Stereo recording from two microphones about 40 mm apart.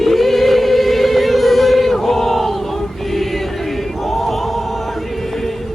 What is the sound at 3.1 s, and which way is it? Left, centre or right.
Music, centre.